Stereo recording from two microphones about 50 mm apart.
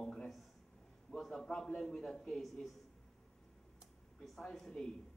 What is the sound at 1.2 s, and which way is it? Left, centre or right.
Speech, centre.